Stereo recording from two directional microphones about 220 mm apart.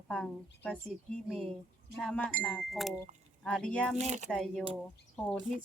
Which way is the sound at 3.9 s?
30° right (ahead or behind).